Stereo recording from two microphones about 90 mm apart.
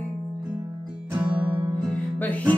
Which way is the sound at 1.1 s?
20° right (ahead or behind).